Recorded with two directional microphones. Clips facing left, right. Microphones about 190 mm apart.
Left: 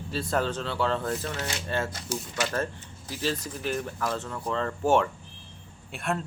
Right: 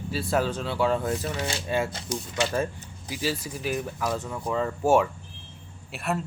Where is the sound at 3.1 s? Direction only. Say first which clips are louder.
Right 1 dB; 10° right (ahead or behind).